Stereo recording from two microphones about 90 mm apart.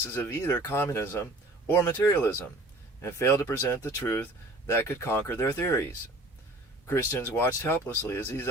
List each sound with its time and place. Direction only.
0.0 s speech: 30° left (ahead or behind)
6.8 s speech: 25° left (ahead or behind)